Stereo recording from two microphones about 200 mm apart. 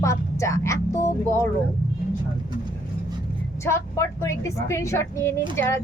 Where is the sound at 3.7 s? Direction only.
15° left (ahead or behind).